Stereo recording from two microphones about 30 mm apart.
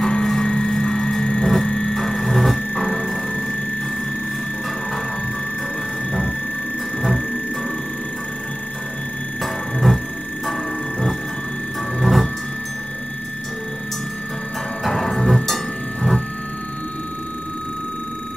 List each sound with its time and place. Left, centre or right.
0.0 s a sound: left; by 2.6 s centre
2.7 s telephone bell ringing: left
9.4 s music: centre
12.0 s music: centre
14.8 s music: centre